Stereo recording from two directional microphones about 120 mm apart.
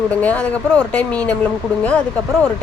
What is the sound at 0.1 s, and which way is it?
Speech, 15° left (ahead or behind).